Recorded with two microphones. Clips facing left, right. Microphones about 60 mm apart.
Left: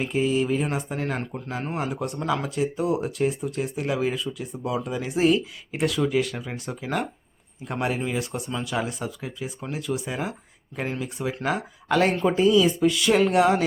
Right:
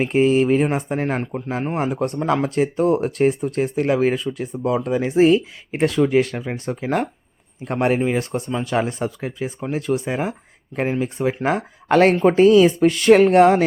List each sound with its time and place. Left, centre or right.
0.0 s speech: right
6.3 s speech: right
7.6 s speech: right
12.2 s speech: right
13.2 s speech: right